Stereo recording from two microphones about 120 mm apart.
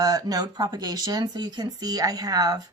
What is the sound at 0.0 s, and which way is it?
Speech, 30° right (ahead or behind).